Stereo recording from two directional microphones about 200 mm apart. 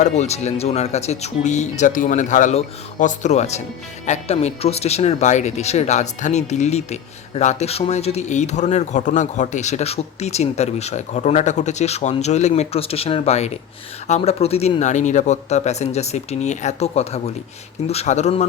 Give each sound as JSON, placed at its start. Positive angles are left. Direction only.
{"t": 0.0, "sound": "speech", "side_deg": 35}